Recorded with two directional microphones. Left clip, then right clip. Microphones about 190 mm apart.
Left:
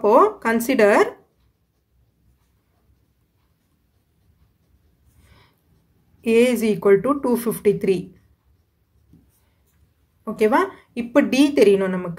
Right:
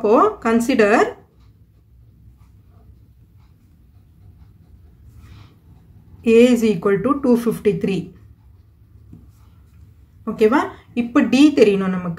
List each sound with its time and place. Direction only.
0.0 s a woman's voice: 35° left (ahead or behind)
6.2 s a woman's voice: 30° left (ahead or behind)
10.2 s a woman's voice: 30° left (ahead or behind)